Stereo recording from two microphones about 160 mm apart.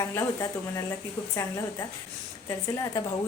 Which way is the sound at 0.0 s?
20° left (ahead or behind).